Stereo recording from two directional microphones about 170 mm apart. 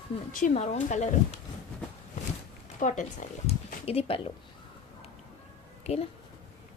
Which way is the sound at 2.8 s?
45° left (ahead or behind).